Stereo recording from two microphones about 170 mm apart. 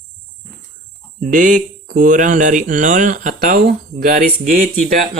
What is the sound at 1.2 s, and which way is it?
Speech, 50° right (ahead or behind).